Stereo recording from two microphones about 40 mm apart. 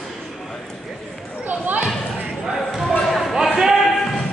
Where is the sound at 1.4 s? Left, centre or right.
Right.